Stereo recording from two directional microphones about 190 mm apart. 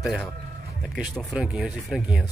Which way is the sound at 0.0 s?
Centre (ahead or behind).